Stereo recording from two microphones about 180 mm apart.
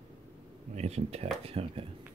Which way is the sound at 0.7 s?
35° right (ahead or behind).